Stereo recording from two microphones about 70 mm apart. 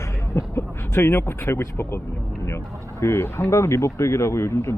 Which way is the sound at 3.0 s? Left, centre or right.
Left.